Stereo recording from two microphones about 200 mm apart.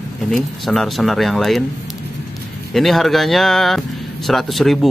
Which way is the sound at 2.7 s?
Centre (ahead or behind).